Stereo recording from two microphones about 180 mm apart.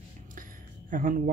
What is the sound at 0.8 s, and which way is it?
Speech, 50° right (ahead or behind).